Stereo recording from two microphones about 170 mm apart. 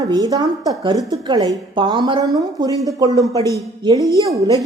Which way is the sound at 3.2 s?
20° left (ahead or behind).